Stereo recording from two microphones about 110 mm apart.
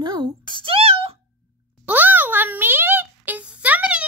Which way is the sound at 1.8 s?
15° right (ahead or behind).